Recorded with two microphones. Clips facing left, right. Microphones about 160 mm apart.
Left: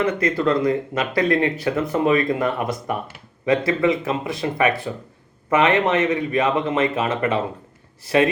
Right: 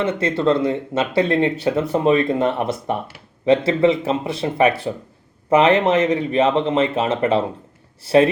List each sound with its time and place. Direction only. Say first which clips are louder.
0.0 s speech: right 1 dB; 30° right (ahead or behind)